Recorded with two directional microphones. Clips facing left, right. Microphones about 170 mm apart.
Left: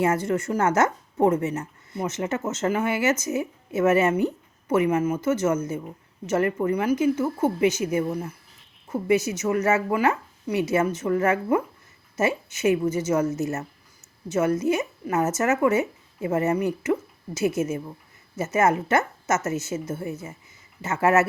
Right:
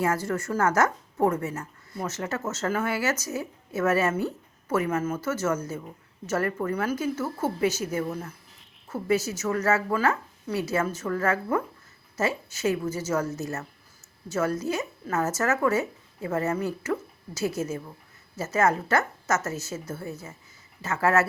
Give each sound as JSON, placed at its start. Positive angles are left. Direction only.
{"t": 0.0, "sound": "a woman's voice", "side_deg": 20}